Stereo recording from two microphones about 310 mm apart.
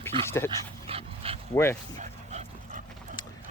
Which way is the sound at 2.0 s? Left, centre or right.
Right.